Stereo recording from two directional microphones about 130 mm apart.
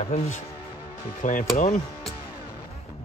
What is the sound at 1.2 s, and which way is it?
Speech, 65° left (ahead or behind).